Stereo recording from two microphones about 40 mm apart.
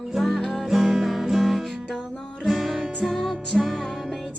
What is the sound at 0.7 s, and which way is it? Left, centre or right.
Music, centre.